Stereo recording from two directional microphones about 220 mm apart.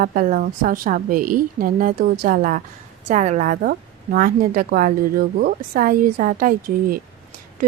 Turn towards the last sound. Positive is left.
turn(degrees=-40)  # may be behind; listen again after turning